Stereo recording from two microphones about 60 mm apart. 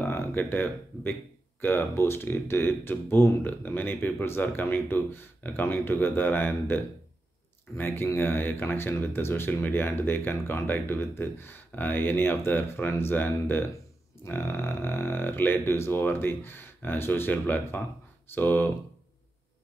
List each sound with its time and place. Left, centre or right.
0.0 s speech: left